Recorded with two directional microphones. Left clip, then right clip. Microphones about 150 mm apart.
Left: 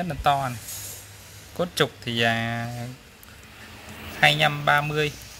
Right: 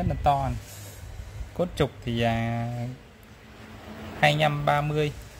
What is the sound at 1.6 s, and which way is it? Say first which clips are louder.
Speech: left 3 dB; 5° right (ahead or behind).